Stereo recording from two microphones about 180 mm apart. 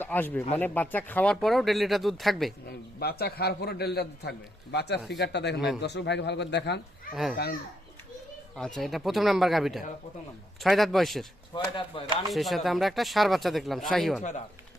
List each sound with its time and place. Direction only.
0.0 s speech: 10° left (ahead or behind)
2.6 s a man's voice: 60° left (ahead or behind)
5.5 s speech: centre (ahead or behind)
5.8 s speech: 70° left (ahead or behind)
8.5 s speech: 5° left (ahead or behind)
11.5 s speech: 30° left (ahead or behind)
12.3 s speech: centre (ahead or behind)
14.2 s speech: 40° left (ahead or behind)